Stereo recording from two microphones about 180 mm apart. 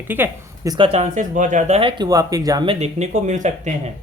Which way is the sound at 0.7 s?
30° right (ahead or behind).